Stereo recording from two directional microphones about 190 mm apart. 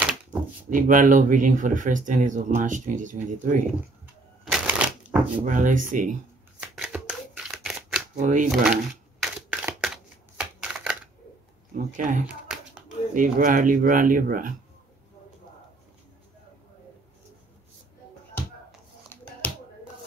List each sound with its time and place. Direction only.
0.7 s speech: 45° right (ahead or behind)
4.5 s shuffling cards: 5° right (ahead or behind)
5.4 s speech: 45° right (ahead or behind)
6.6 s shuffling cards: 5° right (ahead or behind)
8.2 s speech: 40° right (ahead or behind)
9.2 s a sound: 5° right (ahead or behind)
10.3 s shuffling cards: 5° right (ahead or behind)
11.7 s speech: 45° right (ahead or behind)
12.3 s clapping: 5° right (ahead or behind)
13.1 s speech: 45° right (ahead or behind)